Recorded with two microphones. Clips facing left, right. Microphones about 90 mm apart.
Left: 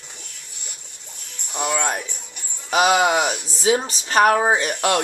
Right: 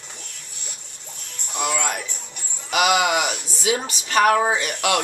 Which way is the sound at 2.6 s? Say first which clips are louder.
Left 2 dB; 30° left (ahead or behind).